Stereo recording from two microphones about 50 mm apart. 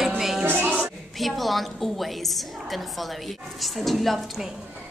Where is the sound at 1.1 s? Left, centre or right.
Centre.